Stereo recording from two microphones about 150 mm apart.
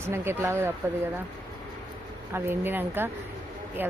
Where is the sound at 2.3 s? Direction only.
15° right (ahead or behind).